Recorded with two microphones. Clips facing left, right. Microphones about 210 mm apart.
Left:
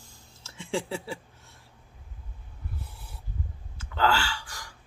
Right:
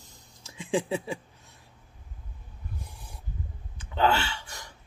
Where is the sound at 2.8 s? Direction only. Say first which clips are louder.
Even; 15° right (ahead or behind).